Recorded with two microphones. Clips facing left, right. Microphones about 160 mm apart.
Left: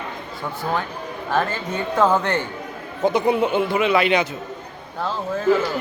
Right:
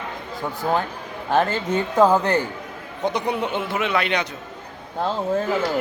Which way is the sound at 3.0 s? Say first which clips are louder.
Left 5 dB; 5° left (ahead or behind).